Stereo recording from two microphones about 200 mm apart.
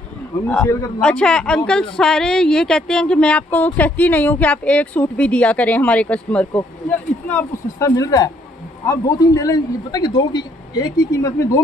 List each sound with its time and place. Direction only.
0.5 s speech: 5° left (ahead or behind)